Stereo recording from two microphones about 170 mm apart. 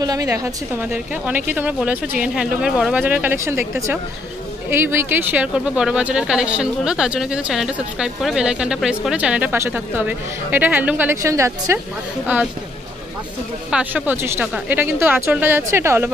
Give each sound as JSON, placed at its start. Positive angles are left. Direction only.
{"t": 0.0, "sound": "a woman's voice", "side_deg": -20}
{"t": 0.9, "sound": "speech", "side_deg": -10}
{"t": 4.6, "sound": "speech", "side_deg": -15}
{"t": 13.7, "sound": "speech", "side_deg": -5}